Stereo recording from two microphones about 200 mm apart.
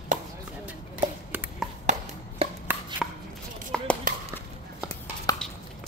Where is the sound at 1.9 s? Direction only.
35° right (ahead or behind).